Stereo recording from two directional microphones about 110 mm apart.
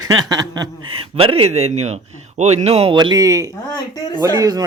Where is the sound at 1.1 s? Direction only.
55° right (ahead or behind).